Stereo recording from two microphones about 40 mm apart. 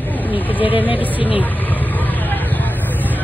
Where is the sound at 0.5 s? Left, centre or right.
Right.